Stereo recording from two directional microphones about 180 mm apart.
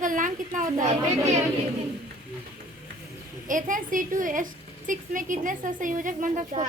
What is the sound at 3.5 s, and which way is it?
A woman's voice, 45° right (ahead or behind).